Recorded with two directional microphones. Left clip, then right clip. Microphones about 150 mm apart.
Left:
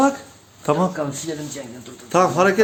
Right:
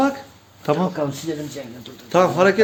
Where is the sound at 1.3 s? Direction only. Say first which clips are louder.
Right 2 dB; 45° right (ahead or behind).